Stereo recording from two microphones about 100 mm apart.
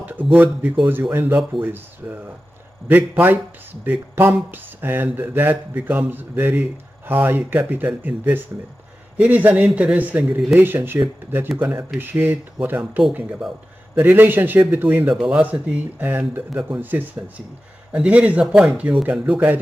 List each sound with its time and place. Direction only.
0.3 s speech: 20° right (ahead or behind)
15.2 s speech: 10° right (ahead or behind)
17.9 s speech: 10° right (ahead or behind)